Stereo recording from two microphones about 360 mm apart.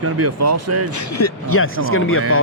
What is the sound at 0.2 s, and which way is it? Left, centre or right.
Speech, right.